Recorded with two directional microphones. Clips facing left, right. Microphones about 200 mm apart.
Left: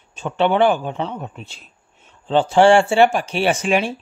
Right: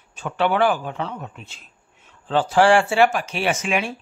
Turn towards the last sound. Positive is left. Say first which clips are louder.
# left 4 dB
turn(degrees=30)  # may be behind; listen again after turning